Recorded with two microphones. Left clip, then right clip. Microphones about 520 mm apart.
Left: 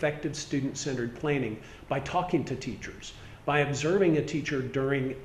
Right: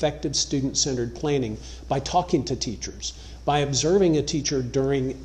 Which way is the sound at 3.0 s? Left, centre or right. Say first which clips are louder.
Right 9 dB; right.